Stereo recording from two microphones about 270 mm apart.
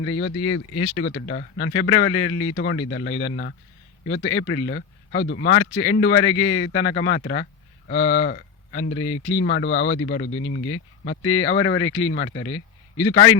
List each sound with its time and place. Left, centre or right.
0.0 s speech: left
1.1 s speech: left
9.6 s speech: left
9.9 s a man's voice: left